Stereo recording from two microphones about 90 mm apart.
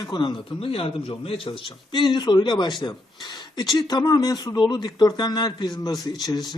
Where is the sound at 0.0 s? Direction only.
55° left (ahead or behind).